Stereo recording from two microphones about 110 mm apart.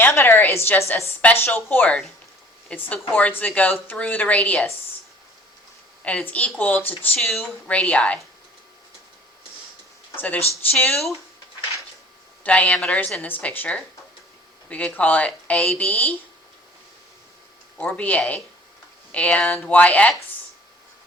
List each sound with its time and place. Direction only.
0.0 s a woman's voice: 20° left (ahead or behind)
6.0 s a woman's voice: 10° left (ahead or behind)
10.2 s a woman's voice: 15° left (ahead or behind)
12.5 s a woman's voice: 10° left (ahead or behind)
17.7 s a woman's voice: 15° left (ahead or behind)